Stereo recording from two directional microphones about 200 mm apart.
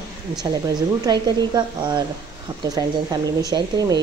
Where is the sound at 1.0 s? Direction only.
20° right (ahead or behind).